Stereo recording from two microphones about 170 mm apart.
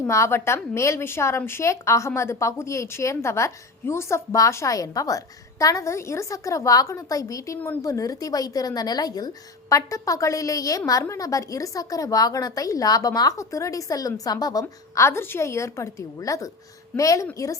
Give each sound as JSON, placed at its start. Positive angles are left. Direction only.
{"t": 0.1, "sound": "a woman's voice", "side_deg": 15}